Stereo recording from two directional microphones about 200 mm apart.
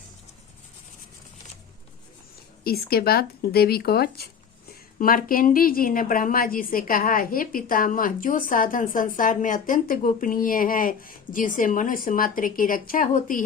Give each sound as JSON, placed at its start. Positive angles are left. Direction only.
{"t": 2.6, "sound": "speech", "side_deg": 50}